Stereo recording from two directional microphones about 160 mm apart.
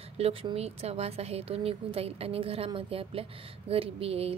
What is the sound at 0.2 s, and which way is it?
A woman's voice, 35° right (ahead or behind).